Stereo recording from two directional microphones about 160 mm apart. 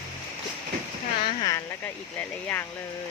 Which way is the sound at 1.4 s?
25° left (ahead or behind).